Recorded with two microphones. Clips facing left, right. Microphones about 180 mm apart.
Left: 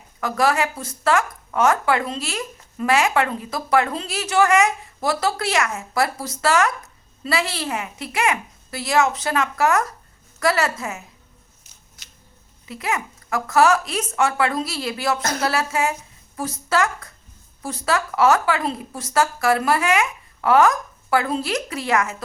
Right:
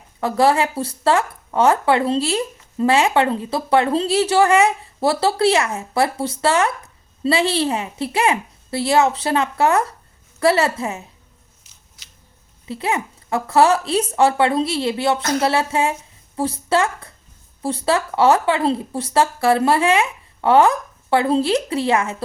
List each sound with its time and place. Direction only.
0.2 s speech: 30° right (ahead or behind)
12.6 s speech: 30° right (ahead or behind)